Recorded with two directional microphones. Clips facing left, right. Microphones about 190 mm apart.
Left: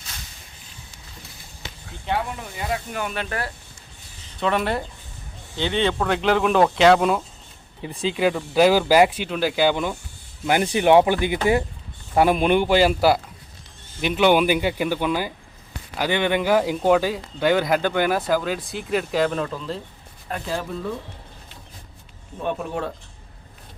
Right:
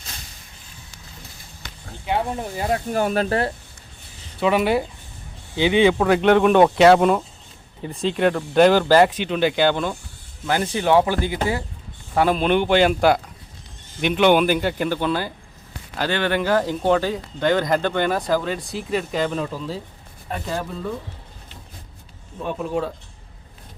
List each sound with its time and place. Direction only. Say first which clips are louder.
2.1 s speech: right 4 dB; 35° right (ahead or behind)
4.4 s speech: right 4 dB; 5° right (ahead or behind)